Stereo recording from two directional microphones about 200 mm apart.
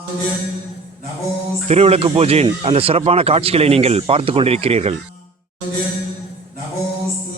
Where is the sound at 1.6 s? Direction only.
30° right (ahead or behind).